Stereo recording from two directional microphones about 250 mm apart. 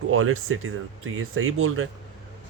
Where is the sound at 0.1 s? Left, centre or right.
Right.